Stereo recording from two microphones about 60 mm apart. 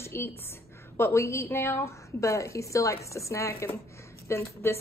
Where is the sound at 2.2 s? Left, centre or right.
Left.